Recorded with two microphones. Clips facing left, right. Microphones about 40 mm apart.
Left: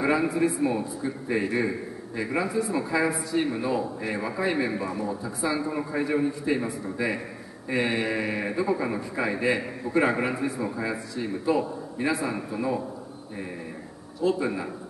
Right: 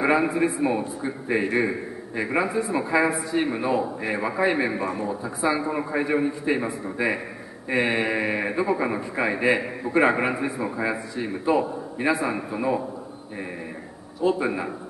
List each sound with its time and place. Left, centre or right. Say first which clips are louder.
0.0 s a man's voice: right 2 dB; right
14.2 s a man's voice: right 2 dB; centre